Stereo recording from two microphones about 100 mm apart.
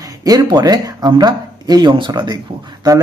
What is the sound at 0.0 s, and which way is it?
Speech, 35° right (ahead or behind).